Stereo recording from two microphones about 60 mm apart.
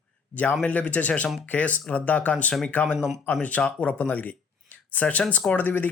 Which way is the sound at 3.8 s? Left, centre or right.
Left.